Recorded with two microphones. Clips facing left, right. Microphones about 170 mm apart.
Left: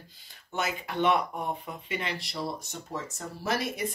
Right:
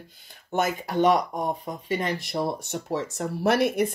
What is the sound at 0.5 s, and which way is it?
Speech, 45° right (ahead or behind).